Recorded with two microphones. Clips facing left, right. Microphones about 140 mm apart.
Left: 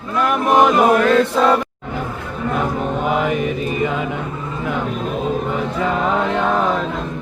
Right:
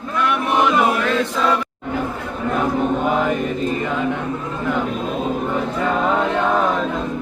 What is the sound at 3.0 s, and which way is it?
Mantra, 5° left (ahead or behind).